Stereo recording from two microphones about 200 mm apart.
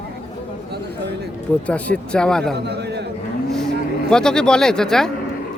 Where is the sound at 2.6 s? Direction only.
55° right (ahead or behind).